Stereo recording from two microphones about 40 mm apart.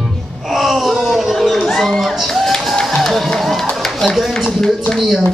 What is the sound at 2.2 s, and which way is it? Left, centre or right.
Music, centre.